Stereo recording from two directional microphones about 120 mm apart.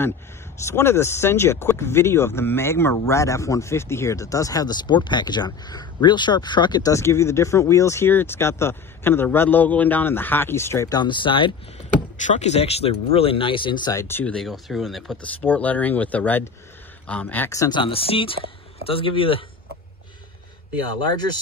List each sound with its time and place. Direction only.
0.7 s speech: 20° left (ahead or behind)
11.0 s speech: 40° left (ahead or behind)
12.3 s speech: 65° left (ahead or behind); by 13.9 s 40° left (ahead or behind)
13.9 s speech: 20° left (ahead or behind)
14.3 s speech: centre (ahead or behind)
15.4 s speech: 15° left (ahead or behind)
17.5 s speech: 25° left (ahead or behind)
17.7 s speech: 50° left (ahead or behind)